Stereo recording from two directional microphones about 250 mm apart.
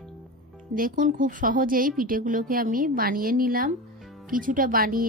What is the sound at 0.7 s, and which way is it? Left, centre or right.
Speech, right.